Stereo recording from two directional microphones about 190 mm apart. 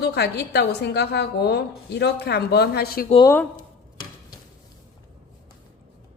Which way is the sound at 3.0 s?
25° left (ahead or behind).